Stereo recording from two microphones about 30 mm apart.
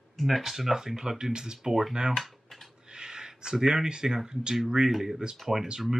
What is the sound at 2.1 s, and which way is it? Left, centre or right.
Typing, centre.